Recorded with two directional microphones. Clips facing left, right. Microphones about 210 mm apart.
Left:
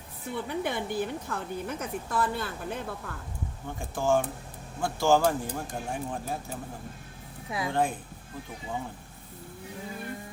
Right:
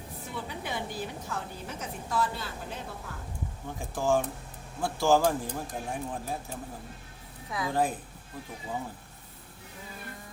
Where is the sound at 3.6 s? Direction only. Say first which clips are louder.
Left 1 dB; centre (ahead or behind).